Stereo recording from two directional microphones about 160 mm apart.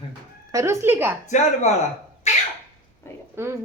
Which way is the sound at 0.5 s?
15° right (ahead or behind).